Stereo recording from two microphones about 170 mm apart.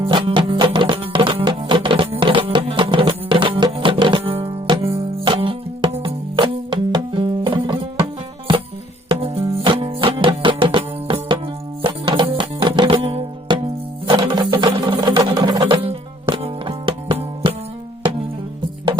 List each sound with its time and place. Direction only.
0.0 s music: 30° right (ahead or behind)
9.0 s music: 35° right (ahead or behind)